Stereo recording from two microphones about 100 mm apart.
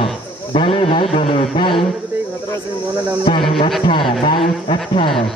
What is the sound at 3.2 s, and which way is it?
Speech, 60° left (ahead or behind).